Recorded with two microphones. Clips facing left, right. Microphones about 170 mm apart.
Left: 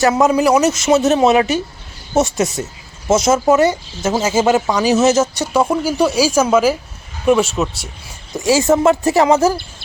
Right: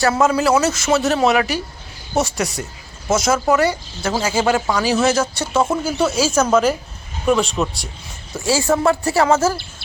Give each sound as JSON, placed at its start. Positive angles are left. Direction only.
{"t": 0.0, "sound": "speech", "side_deg": 20}
{"t": 8.3, "sound": "speech", "side_deg": 15}